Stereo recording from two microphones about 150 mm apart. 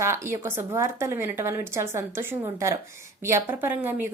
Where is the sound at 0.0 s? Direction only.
15° right (ahead or behind).